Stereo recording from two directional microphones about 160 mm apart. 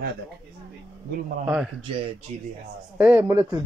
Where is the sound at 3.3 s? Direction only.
30° right (ahead or behind).